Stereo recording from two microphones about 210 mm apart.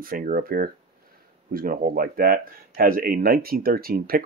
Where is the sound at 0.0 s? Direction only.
40° right (ahead or behind).